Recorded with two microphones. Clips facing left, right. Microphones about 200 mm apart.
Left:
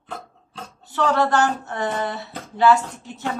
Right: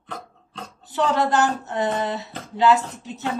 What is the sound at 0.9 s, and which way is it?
Speech, 15° right (ahead or behind).